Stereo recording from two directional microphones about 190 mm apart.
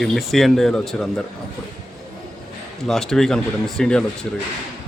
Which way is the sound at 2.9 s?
Centre (ahead or behind).